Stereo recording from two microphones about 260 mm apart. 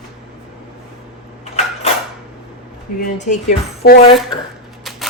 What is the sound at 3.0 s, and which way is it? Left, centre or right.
Speech, left.